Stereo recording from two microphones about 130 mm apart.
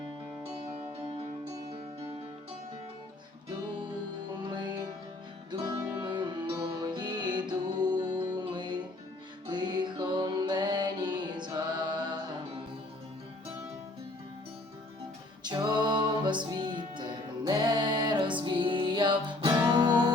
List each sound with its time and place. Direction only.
6.0 s music: 35° right (ahead or behind)
15.4 s music: 35° right (ahead or behind)